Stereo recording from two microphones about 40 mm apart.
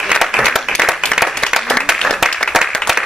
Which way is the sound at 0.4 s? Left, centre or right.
Centre.